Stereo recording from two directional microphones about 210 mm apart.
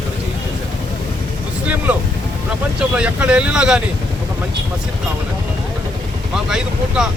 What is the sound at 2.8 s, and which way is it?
Speech, 5° right (ahead or behind).